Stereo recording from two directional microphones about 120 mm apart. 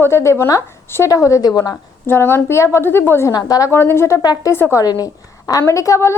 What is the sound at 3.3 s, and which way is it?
A woman's voice, 30° left (ahead or behind).